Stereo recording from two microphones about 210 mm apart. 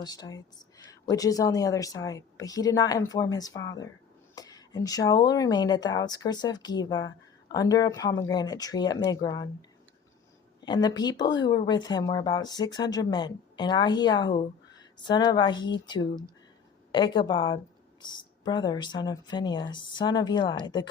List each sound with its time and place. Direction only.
0.0 s speech: 20° left (ahead or behind)